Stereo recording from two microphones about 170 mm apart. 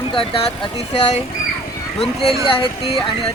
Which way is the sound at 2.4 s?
30° left (ahead or behind).